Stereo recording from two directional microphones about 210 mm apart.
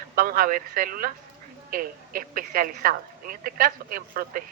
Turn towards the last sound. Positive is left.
turn(degrees=-40)  # may be behind; listen again after turning